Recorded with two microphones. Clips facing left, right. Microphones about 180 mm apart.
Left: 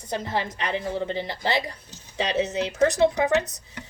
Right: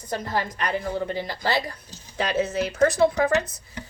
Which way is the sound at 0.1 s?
25° left (ahead or behind).